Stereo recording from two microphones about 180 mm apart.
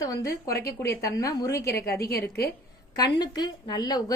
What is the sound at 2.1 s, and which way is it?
Speech, 60° left (ahead or behind).